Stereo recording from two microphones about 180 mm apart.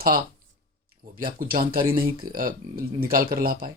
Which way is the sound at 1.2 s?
55° right (ahead or behind).